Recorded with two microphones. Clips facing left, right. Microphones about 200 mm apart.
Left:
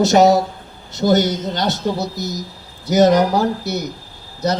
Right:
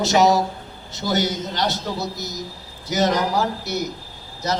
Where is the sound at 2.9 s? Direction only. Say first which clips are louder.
Left 8 dB; 50° left (ahead or behind).